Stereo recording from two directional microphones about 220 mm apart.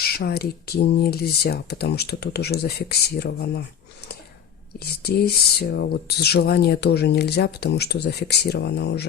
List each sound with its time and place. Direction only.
0.2 s speech: 45° left (ahead or behind)
4.8 s speech: 45° left (ahead or behind)